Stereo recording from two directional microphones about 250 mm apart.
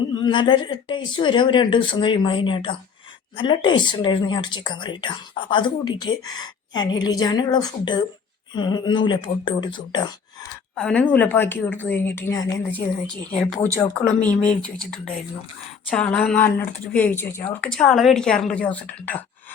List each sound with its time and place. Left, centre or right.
0.1 s a woman's voice: centre
10.8 s a woman's voice: centre